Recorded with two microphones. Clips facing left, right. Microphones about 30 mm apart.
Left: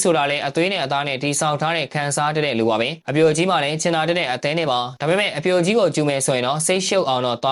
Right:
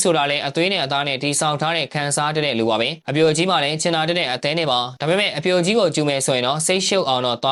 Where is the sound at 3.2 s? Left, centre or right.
Right.